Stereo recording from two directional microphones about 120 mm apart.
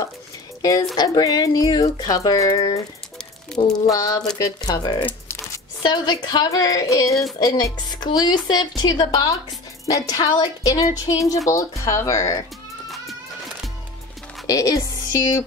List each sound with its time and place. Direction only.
0.6 s speech: 30° left (ahead or behind)
3.5 s speech: 5° left (ahead or behind)
3.8 s speech: 30° left (ahead or behind)
4.2 s speech: 5° left (ahead or behind)
4.6 s speech: 30° left (ahead or behind)
14.5 s speech: 30° left (ahead or behind)